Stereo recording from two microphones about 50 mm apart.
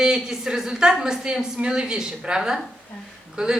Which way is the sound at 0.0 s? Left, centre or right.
Centre.